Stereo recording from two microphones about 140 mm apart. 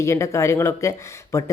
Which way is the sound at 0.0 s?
20° left (ahead or behind).